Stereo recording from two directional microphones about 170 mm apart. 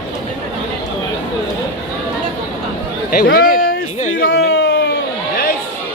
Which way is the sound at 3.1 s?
60° left (ahead or behind).